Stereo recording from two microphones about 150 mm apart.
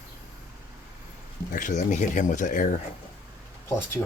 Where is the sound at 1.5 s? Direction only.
60° left (ahead or behind).